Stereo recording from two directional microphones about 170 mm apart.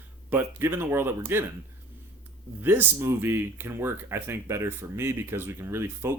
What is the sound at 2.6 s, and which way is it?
Speech, 10° right (ahead or behind).